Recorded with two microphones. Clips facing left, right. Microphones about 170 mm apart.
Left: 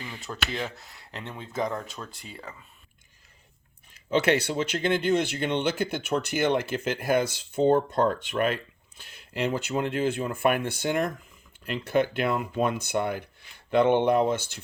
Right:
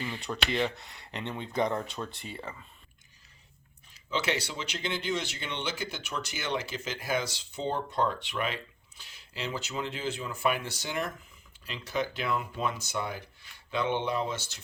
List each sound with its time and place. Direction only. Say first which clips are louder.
0.0 s speech: right 2 dB; centre (ahead or behind)
3.9 s speech: left 8 dB; 55° left (ahead or behind)